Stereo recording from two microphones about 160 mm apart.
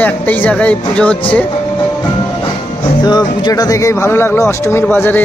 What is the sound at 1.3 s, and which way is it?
Music, 10° left (ahead or behind).